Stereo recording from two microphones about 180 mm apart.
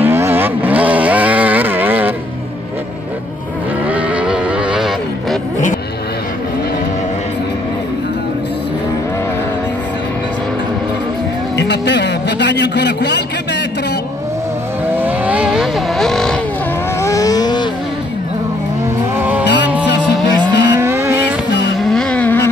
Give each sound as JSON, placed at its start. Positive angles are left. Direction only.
{"t": 0.0, "sound": "vehicle", "side_deg": -10}
{"t": 3.8, "sound": "vehicle", "side_deg": -10}
{"t": 11.5, "sound": "music", "side_deg": 70}
{"t": 14.9, "sound": "vehicle", "side_deg": -10}
{"t": 17.0, "sound": "vehicle", "side_deg": 20}
{"t": 19.1, "sound": "vehicle", "side_deg": -10}
{"t": 19.4, "sound": "music", "side_deg": 70}
{"t": 20.2, "sound": "vehicle", "side_deg": 75}
{"t": 20.7, "sound": "vehicle", "side_deg": -15}
{"t": 21.7, "sound": "vehicle", "side_deg": 0}